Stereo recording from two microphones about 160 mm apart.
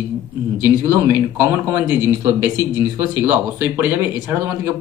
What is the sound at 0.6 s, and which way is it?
Speech, 15° right (ahead or behind).